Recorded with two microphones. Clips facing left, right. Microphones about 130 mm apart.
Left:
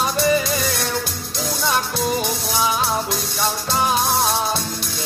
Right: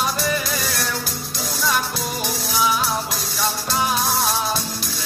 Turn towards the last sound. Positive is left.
turn(degrees=0)  # may be behind; listen again after turning